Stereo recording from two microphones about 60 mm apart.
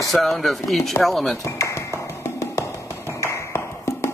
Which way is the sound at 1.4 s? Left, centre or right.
Left.